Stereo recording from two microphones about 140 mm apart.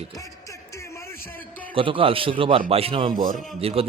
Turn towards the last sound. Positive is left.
turn(degrees=-45)  # may be behind; listen again after turning